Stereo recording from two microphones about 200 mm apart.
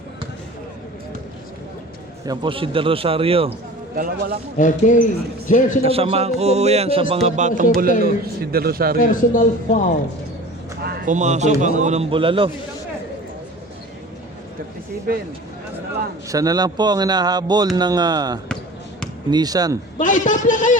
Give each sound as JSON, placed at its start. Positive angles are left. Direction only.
{"t": 2.2, "sound": "speech", "side_deg": -20}
{"t": 3.9, "sound": "a man's voice", "side_deg": -45}
{"t": 4.5, "sound": "a man's voice", "side_deg": 40}
{"t": 5.8, "sound": "speech", "side_deg": -30}
{"t": 8.0, "sound": "a man's voice", "side_deg": -50}
{"t": 9.0, "sound": "a man's voice", "side_deg": 40}
{"t": 10.8, "sound": "speech", "side_deg": -40}
{"t": 16.3, "sound": "speech", "side_deg": -20}
{"t": 20.0, "sound": "a man's voice", "side_deg": 40}